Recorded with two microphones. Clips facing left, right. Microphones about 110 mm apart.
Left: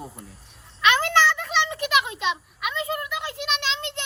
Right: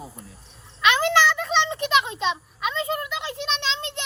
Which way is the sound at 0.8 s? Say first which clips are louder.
Right 1 dB; 20° right (ahead or behind).